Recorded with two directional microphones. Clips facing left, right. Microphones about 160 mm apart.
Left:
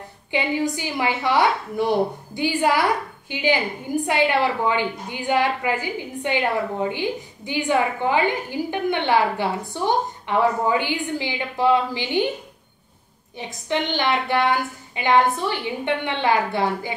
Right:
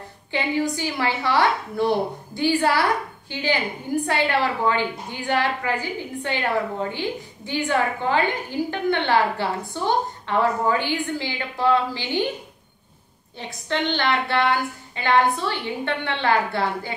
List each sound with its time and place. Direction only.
0.3 s a woman's voice: 15° left (ahead or behind)
13.4 s a woman's voice: 15° left (ahead or behind)